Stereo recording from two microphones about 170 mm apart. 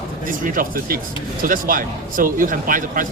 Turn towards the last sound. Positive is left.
turn(degrees=-55)  # may be behind; listen again after turning